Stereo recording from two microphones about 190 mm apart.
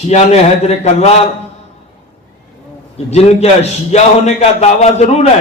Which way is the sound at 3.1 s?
35° left (ahead or behind).